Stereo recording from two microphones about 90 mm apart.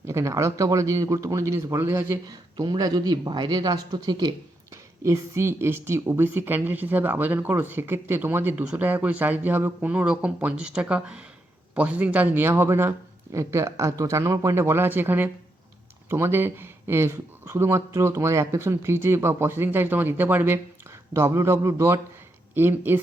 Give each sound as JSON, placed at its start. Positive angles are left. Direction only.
{"t": 0.0, "sound": "speech", "side_deg": -30}
{"t": 2.6, "sound": "speech", "side_deg": -45}
{"t": 4.7, "sound": "a woman's voice", "side_deg": -35}